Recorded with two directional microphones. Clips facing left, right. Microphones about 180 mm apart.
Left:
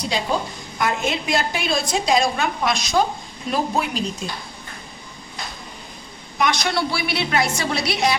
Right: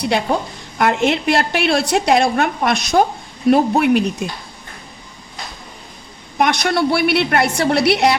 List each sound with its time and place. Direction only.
0.0 s a woman's voice: 60° right (ahead or behind)
6.4 s a woman's voice: 55° right (ahead or behind)